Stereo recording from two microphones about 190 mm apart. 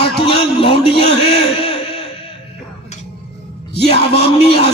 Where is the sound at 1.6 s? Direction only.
30° left (ahead or behind).